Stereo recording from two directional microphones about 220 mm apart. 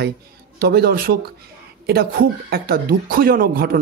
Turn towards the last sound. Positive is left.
turn(degrees=-40)  # may be behind; listen again after turning